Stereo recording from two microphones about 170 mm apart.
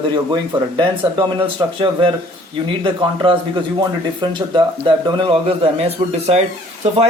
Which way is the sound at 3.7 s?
25° right (ahead or behind).